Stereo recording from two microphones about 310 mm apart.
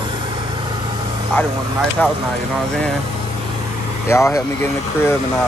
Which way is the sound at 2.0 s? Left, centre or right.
Centre.